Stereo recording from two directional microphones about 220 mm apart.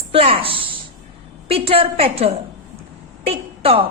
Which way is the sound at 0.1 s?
25° right (ahead or behind).